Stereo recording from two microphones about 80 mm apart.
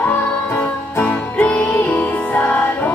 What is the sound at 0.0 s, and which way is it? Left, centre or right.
Music, left.